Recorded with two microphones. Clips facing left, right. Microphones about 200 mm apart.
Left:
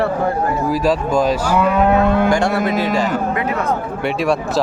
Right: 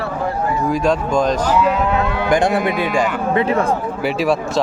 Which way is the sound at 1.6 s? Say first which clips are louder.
Left 3 dB; 55° left (ahead or behind).